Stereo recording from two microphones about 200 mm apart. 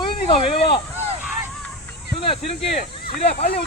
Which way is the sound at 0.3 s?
30° left (ahead or behind).